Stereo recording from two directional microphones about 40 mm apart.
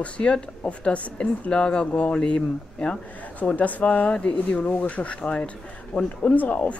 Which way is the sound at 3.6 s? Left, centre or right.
Left.